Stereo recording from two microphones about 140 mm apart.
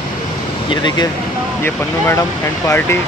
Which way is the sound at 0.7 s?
30° left (ahead or behind).